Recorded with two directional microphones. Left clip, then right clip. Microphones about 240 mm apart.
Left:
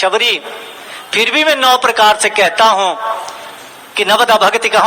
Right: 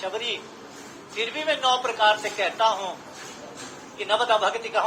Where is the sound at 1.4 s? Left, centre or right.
Left.